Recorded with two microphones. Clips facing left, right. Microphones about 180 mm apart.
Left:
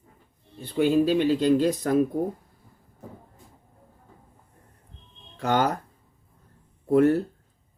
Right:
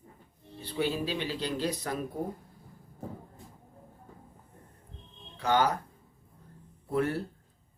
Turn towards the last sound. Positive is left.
turn(degrees=45)  # may be behind; listen again after turning